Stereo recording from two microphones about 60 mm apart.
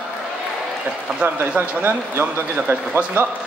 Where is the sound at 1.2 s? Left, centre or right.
Right.